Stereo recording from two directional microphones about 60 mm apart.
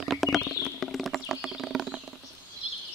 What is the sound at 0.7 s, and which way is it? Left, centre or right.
Clip-clop, centre.